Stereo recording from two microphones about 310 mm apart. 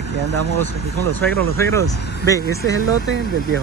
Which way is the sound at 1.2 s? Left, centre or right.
Centre.